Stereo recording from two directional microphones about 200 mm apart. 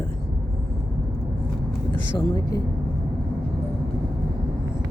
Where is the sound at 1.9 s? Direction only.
20° left (ahead or behind).